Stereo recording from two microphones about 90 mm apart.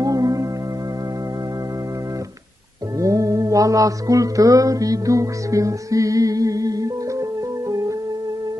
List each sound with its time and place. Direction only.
0.0 s music: 40° right (ahead or behind)
3.0 s mantra: 40° right (ahead or behind)